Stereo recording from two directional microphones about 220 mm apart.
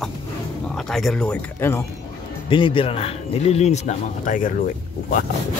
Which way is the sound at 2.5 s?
25° left (ahead or behind).